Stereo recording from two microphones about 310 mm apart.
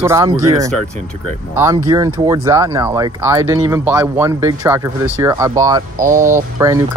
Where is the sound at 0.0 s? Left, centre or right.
Centre.